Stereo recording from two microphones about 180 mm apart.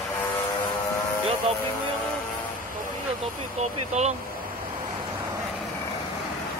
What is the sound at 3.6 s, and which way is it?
Speech, 40° right (ahead or behind).